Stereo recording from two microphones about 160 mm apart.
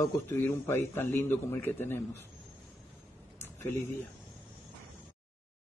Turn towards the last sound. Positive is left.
turn(degrees=15)  # may be behind; listen again after turning